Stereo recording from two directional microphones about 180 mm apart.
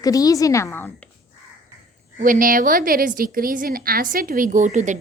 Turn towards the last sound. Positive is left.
turn(degrees=-40)  # may be behind; listen again after turning